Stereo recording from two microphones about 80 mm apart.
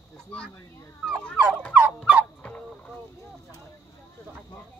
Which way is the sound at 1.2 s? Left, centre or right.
Centre.